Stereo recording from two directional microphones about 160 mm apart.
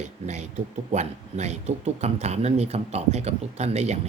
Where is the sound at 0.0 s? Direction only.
45° right (ahead or behind).